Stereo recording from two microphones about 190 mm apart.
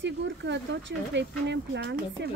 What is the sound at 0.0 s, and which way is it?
Speech, 70° right (ahead or behind).